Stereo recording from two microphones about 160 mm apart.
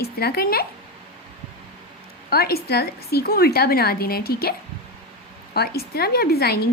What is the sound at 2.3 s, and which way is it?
A woman's voice, 75° left (ahead or behind).